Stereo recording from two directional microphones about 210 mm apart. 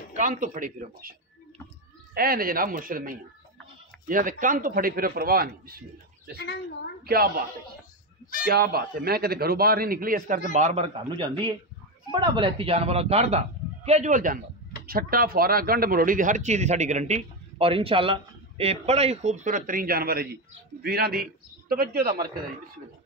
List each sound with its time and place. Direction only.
0.1 s speech: 40° right (ahead or behind)
2.1 s a man's voice: 45° right (ahead or behind)
6.3 s speech: 55° left (ahead or behind)
7.1 s a man's voice: 45° right (ahead or behind)
8.5 s a man's voice: 45° right (ahead or behind); by 10.9 s 30° right (ahead or behind)
12.1 s a man's voice: 25° right (ahead or behind); by 22.2 s 45° right (ahead or behind)